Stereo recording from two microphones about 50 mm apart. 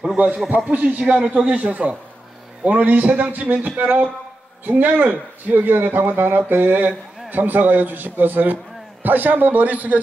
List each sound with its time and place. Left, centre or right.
0.2 s a man's voice: right